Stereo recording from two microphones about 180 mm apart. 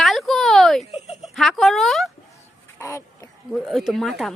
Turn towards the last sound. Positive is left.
turn(degrees=0)  # may be behind; listen again after turning